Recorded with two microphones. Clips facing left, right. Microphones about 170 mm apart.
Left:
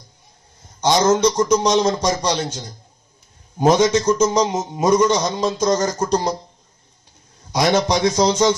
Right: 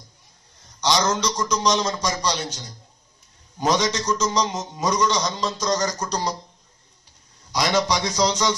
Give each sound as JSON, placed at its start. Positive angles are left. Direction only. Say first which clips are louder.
{"t": 0.7, "sound": "speech", "louder": "left 6 dB", "side_deg": 50}
{"t": 7.5, "sound": "speech", "louder": "left 5 dB", "side_deg": 50}